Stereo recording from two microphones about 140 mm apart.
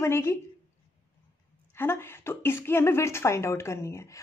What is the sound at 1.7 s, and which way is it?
Speech, 15° left (ahead or behind).